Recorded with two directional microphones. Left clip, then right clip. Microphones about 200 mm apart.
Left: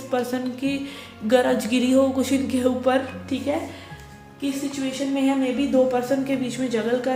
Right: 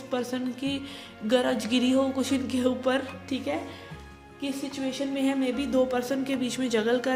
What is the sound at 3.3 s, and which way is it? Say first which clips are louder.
Speech: left 4 dB; 50° right (ahead or behind).